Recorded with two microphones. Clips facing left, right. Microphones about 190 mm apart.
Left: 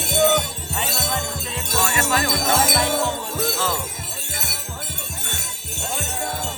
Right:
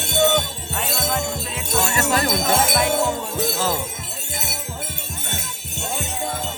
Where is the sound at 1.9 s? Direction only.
35° right (ahead or behind).